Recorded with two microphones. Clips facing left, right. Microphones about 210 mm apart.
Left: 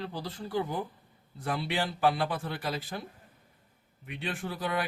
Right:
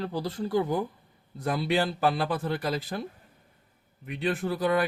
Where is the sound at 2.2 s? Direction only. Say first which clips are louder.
Right 5 dB; 45° right (ahead or behind).